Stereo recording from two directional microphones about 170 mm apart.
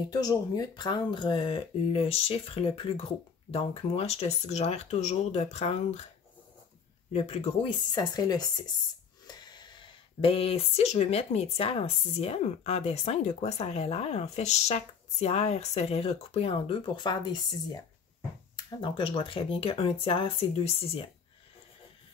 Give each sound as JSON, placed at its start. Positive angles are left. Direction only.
{"t": 0.1, "sound": "speech", "side_deg": 20}
{"t": 7.1, "sound": "speech", "side_deg": 35}
{"t": 18.8, "sound": "speech", "side_deg": 30}